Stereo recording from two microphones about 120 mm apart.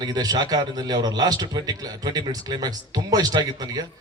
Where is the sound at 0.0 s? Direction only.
35° right (ahead or behind).